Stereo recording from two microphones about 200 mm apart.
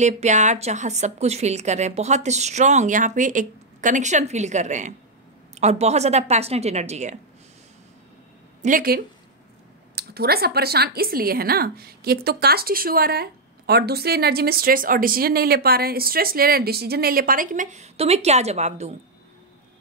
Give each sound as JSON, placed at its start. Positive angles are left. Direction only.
{"t": 0.0, "sound": "speech", "side_deg": -35}
{"t": 8.6, "sound": "speech", "side_deg": -45}